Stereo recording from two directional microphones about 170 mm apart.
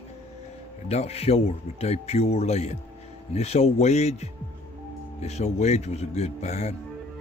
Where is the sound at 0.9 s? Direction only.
40° left (ahead or behind).